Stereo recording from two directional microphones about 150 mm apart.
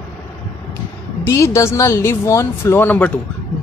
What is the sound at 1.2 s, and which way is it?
Speech, 20° left (ahead or behind).